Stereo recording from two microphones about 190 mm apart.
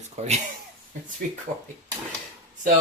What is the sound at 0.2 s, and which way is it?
Speech, 35° right (ahead or behind).